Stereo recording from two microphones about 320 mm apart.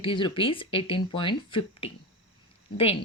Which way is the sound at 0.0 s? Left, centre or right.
Centre.